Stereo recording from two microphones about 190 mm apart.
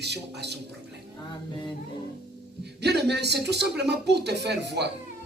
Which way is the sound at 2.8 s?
60° right (ahead or behind).